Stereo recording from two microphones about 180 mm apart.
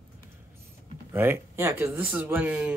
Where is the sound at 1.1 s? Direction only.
15° right (ahead or behind).